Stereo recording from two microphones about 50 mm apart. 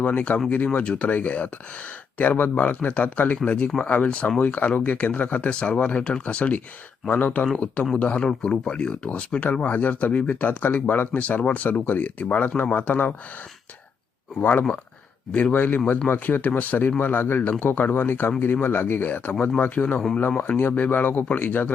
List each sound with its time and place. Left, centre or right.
0.0 s speech: left
7.1 s speech: left
7.5 s speech: left
9.6 s speech: left
10.4 s speech: left
15.5 s speech: left